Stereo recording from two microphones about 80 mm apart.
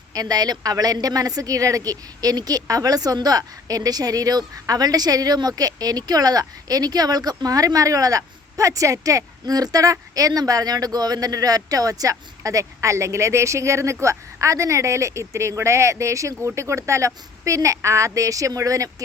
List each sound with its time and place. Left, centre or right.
0.1 s speech: right